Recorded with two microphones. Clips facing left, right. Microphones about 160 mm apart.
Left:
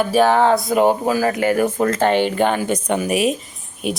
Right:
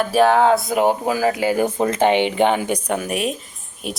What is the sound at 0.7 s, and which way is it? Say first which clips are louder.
A woman's voice: left 2 dB; 15° right (ahead or behind).